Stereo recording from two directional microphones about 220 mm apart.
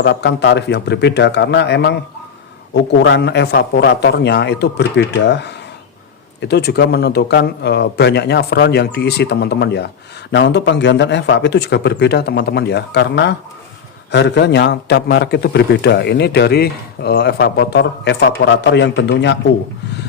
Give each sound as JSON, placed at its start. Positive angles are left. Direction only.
{"t": 0.0, "sound": "a man's voice", "side_deg": 50}